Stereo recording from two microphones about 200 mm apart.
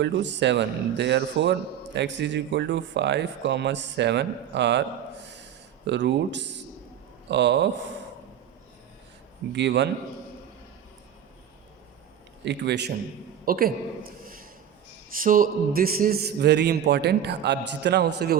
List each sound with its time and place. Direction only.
0.0 s a man's voice: 60° right (ahead or behind)
5.3 s gasp: 60° right (ahead or behind)
7.3 s a man's voice: 60° right (ahead or behind)
9.5 s a man's voice: 60° right (ahead or behind)
12.5 s a man's voice: 60° right (ahead or behind)
13.4 s a woman's voice: 45° right (ahead or behind)